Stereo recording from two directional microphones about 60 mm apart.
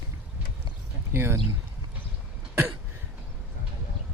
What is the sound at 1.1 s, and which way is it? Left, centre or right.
Speech, right.